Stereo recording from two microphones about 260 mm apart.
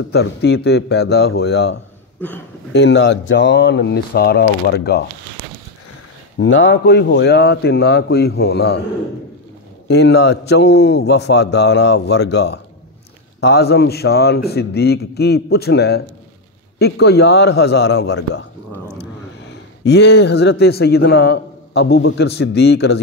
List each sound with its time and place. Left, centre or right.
0.1 s a man's voice: left
6.4 s a man's voice: left
9.8 s a man's voice: left
19.8 s a man's voice: left